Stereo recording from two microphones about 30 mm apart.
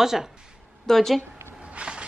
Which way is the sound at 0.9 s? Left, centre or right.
Centre.